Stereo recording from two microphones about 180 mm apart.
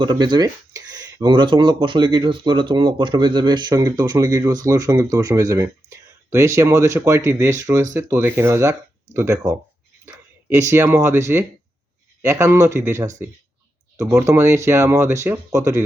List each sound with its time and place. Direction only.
0.0 s speech: 25° right (ahead or behind)